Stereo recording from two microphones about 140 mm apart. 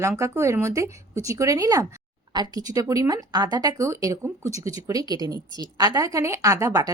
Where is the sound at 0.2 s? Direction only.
20° right (ahead or behind).